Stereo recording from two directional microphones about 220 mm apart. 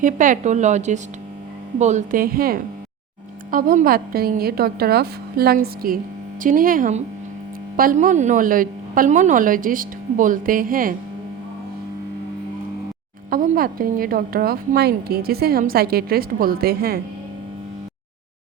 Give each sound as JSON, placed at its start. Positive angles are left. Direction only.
{"t": 0.0, "sound": "a woman's voice", "side_deg": -35}
{"t": 13.3, "sound": "a woman's voice", "side_deg": -40}